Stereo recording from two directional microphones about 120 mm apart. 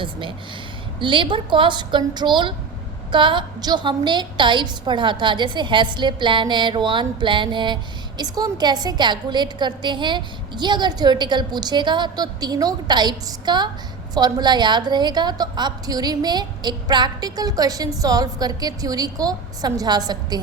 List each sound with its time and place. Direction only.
0.0 s a woman's voice: 45° right (ahead or behind)